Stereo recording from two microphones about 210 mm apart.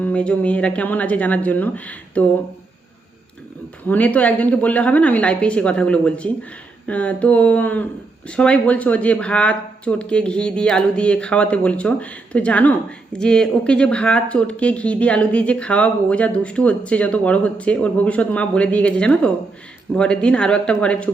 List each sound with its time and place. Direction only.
0.0 s a woman's voice: 5° left (ahead or behind)
3.8 s a woman's voice: 5° left (ahead or behind)